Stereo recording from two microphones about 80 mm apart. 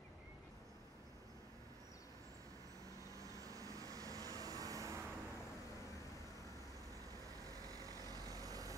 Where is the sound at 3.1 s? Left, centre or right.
Right.